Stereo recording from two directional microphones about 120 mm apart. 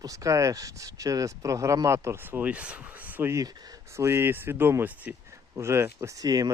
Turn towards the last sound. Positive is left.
turn(degrees=-30)  # may be behind; listen again after turning